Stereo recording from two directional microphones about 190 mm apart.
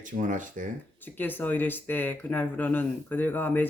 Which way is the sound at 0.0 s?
45° right (ahead or behind).